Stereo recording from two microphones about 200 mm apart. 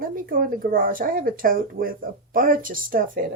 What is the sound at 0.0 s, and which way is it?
Speech, 45° right (ahead or behind).